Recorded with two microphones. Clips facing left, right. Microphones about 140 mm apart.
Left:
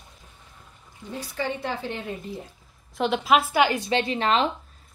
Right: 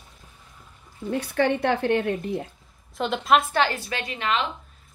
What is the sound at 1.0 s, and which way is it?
Speech, 65° right (ahead or behind).